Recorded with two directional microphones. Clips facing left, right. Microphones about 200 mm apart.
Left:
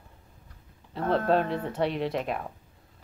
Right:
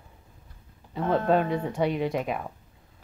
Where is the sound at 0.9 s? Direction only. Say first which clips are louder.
Right 1 dB; centre (ahead or behind).